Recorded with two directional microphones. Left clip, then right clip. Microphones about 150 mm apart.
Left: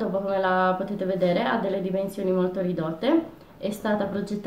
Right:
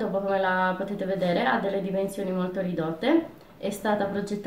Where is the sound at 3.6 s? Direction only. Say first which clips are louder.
Even; 5° left (ahead or behind).